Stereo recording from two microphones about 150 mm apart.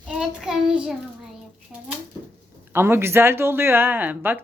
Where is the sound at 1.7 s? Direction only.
5° right (ahead or behind).